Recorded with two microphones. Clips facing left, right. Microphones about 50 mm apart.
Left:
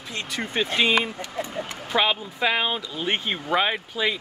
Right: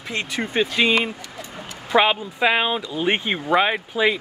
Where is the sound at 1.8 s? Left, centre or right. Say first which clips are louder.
Right 6 dB; right.